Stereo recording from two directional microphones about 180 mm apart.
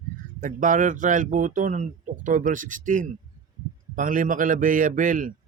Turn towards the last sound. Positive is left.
turn(degrees=-50)  # may be behind; listen again after turning